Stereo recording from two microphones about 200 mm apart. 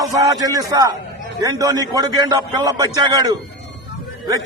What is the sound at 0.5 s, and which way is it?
A man's voice, 20° right (ahead or behind).